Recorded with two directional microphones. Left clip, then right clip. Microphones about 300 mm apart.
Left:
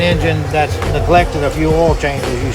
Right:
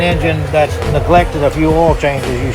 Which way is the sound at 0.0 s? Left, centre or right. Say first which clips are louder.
Right 1 dB; right.